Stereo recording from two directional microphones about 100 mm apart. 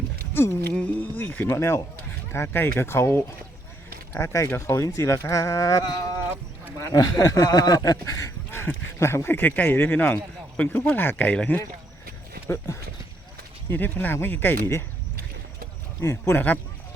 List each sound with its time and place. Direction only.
0.7 s speech: 15° left (ahead or behind)
13.7 s speech: 20° left (ahead or behind)
16.0 s speech: 25° left (ahead or behind)